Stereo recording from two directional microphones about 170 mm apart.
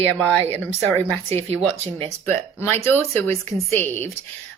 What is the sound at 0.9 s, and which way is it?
Speech, 35° right (ahead or behind).